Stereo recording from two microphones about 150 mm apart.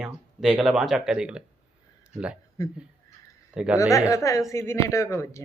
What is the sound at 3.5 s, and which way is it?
Speech, 5° right (ahead or behind).